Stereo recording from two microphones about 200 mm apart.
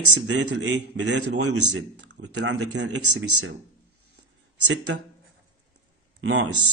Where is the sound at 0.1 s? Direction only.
75° right (ahead or behind).